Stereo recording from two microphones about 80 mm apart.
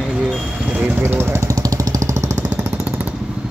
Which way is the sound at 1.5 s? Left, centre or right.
Right.